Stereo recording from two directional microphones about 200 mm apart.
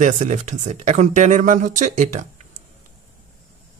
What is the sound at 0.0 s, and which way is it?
Speech, 35° right (ahead or behind).